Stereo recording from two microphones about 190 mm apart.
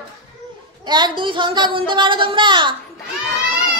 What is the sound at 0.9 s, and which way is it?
A child's voice, 25° right (ahead or behind).